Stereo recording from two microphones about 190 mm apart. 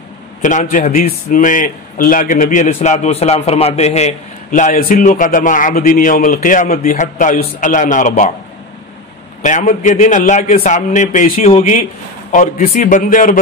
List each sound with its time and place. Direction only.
0.4 s a man's voice: 40° left (ahead or behind)
9.4 s a man's voice: 40° left (ahead or behind)